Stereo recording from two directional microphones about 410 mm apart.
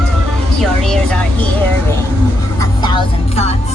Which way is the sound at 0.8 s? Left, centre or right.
Centre.